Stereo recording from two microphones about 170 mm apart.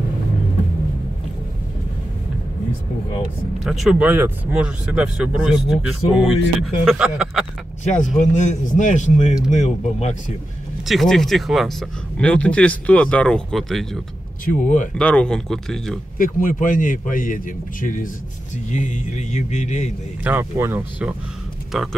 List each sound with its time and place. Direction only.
3.6 s speech: centre (ahead or behind)
7.8 s a man's voice: 50° left (ahead or behind)
10.9 s speech: centre (ahead or behind)
14.4 s a man's voice: 50° left (ahead or behind)
15.0 s speech: 5° left (ahead or behind)
16.2 s a man's voice: 55° left (ahead or behind)
20.2 s speech: 15° right (ahead or behind)
21.7 s speech: centre (ahead or behind)